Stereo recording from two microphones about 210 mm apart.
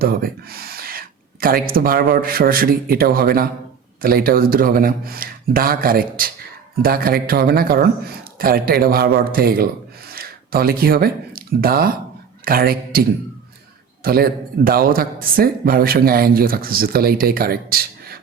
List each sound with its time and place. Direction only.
0.0 s a man's voice: 45° right (ahead or behind)